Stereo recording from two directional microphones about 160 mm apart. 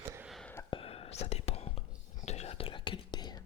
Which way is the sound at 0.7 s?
35° left (ahead or behind).